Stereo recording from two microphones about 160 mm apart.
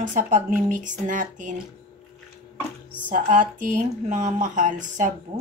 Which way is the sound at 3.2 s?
50° right (ahead or behind).